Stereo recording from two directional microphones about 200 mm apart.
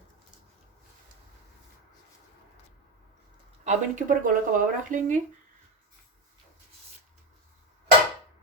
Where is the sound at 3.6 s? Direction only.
40° right (ahead or behind).